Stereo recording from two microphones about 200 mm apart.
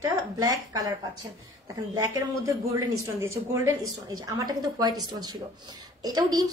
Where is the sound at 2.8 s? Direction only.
15° right (ahead or behind).